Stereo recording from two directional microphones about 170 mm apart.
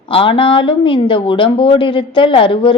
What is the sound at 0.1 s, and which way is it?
A woman's voice, 30° left (ahead or behind).